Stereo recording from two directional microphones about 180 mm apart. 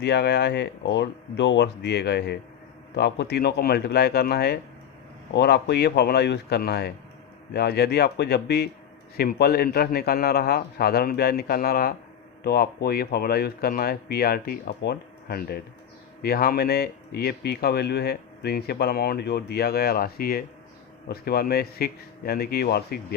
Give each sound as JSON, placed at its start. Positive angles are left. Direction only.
{"t": 0.0, "sound": "speech", "side_deg": 65}